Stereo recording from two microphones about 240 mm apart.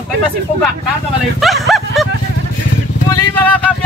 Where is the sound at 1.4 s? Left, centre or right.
Centre.